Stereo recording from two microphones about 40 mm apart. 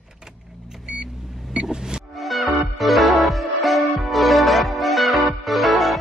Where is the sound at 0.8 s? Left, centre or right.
Right.